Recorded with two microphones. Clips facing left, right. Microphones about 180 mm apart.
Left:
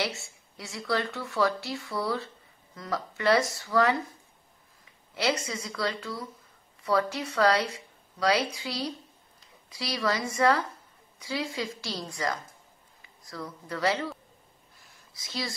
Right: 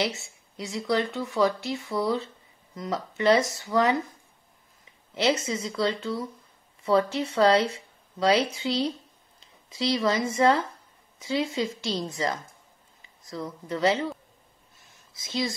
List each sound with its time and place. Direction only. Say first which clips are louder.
0.6 s speech: right 4 dB; 20° right (ahead or behind)
5.1 s speech: right 4 dB; 20° right (ahead or behind)
14.8 s a sound: right 1 dB; 20° right (ahead or behind)